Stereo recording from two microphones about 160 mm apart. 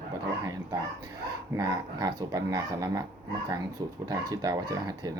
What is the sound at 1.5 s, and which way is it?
Speech, 20° right (ahead or behind).